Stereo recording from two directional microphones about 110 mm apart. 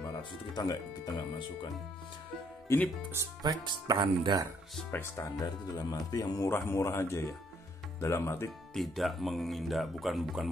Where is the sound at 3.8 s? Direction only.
45° right (ahead or behind).